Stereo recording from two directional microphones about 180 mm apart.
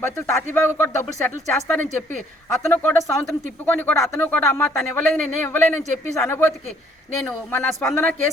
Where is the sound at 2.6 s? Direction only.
10° left (ahead or behind).